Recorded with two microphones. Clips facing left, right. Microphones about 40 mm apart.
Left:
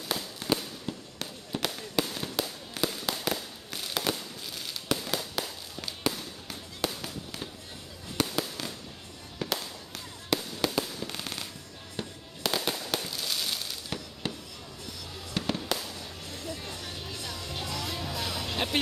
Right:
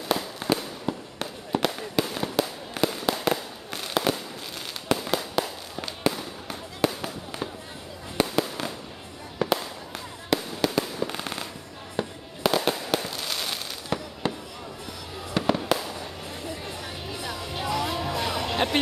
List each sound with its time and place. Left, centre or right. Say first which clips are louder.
0.1 s fireworks: right 5 dB; centre
15.3 s fireworks: right 7 dB; right